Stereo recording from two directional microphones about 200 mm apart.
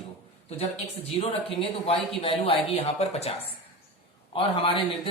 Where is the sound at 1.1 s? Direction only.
30° left (ahead or behind).